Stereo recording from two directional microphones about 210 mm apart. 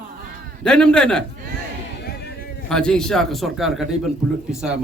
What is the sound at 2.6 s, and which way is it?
A man's voice, 5° left (ahead or behind).